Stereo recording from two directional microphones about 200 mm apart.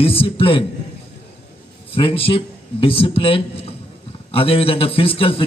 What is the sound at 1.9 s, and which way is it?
A man's voice, 25° left (ahead or behind).